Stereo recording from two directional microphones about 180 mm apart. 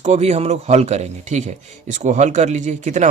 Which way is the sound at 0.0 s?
40° right (ahead or behind).